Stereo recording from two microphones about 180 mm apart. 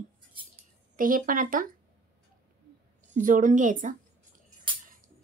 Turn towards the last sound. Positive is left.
turn(degrees=-45)  # may be behind; listen again after turning